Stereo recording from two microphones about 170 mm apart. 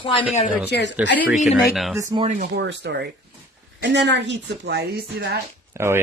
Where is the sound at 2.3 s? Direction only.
50° right (ahead or behind).